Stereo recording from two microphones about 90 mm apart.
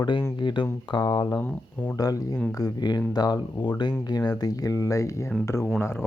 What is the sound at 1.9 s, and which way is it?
Speech, 45° left (ahead or behind).